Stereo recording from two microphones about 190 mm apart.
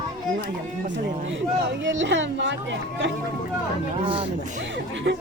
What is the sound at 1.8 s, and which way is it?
Speech, 70° right (ahead or behind).